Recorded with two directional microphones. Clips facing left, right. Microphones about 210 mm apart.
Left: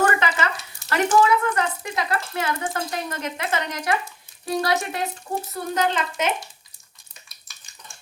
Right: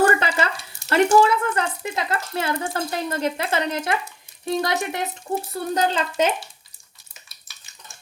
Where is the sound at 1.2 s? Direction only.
30° right (ahead or behind).